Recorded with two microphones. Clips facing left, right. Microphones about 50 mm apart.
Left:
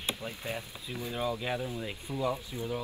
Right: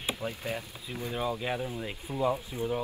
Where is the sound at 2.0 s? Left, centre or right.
Centre.